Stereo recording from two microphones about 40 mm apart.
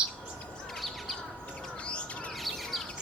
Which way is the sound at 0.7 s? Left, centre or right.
Centre.